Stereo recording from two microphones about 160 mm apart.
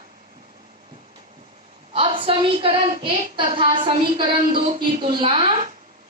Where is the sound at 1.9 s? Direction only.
35° right (ahead or behind).